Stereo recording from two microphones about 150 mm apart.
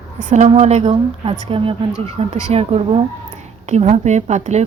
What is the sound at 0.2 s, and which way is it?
A woman's voice, 50° right (ahead or behind).